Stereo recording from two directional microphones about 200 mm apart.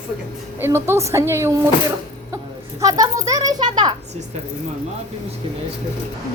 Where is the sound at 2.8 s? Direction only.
20° right (ahead or behind).